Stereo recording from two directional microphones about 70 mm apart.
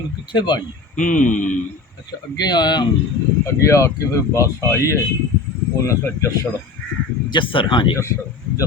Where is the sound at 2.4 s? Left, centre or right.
Left.